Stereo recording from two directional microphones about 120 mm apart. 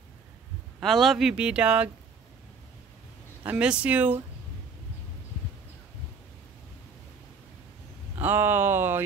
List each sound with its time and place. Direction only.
0.7 s a man's voice: centre (ahead or behind)
3.4 s a man's voice: 10° right (ahead or behind)
8.2 s a man's voice: 15° right (ahead or behind)